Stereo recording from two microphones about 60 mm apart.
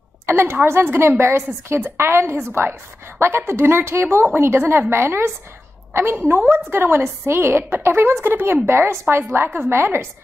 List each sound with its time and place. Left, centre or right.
0.3 s a woman's voice: right